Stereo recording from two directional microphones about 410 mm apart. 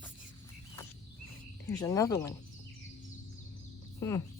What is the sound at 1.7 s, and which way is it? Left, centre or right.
Speech, centre.